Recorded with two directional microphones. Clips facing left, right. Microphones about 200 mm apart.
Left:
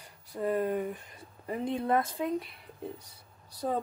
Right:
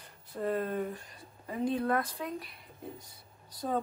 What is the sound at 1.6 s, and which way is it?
Speech, 25° left (ahead or behind).